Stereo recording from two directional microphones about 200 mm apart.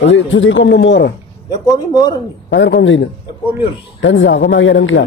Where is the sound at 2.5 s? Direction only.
65° left (ahead or behind).